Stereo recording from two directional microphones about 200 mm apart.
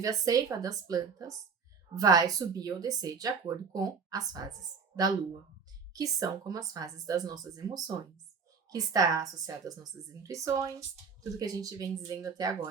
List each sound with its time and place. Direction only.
0.0 s a woman's voice: 15° right (ahead or behind)